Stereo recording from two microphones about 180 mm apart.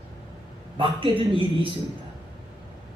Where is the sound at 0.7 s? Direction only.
30° right (ahead or behind).